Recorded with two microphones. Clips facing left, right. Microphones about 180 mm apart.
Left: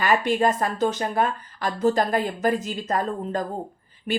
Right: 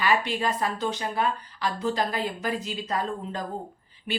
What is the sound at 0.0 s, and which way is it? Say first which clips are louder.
A woman's voice: left 5 dB; 50° left (ahead or behind).